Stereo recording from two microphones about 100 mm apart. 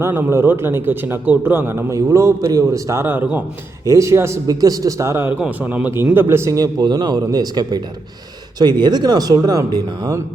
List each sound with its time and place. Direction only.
0.0 s a man's voice: 25° right (ahead or behind)